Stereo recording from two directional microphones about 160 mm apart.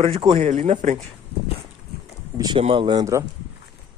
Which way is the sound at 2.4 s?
30° right (ahead or behind).